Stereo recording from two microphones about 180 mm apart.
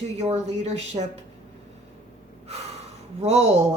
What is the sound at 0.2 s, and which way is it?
Speech, 35° right (ahead or behind).